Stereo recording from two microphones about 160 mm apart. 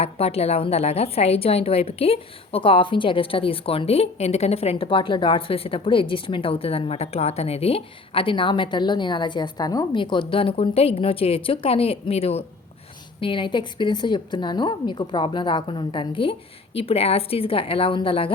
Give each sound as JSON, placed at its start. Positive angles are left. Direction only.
{"t": 0.0, "sound": "a woman's voice", "side_deg": 40}